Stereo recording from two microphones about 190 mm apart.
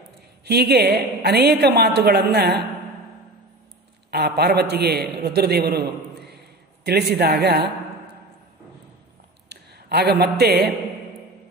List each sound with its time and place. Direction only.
0.5 s a woman's voice: 55° right (ahead or behind)
4.1 s a woman's voice: 60° right (ahead or behind)
9.5 s speech: 60° right (ahead or behind)